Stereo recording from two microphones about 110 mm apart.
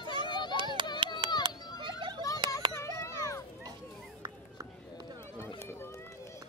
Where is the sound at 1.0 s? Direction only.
45° right (ahead or behind).